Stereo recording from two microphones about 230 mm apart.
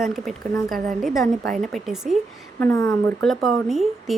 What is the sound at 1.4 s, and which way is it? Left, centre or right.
Speech, right.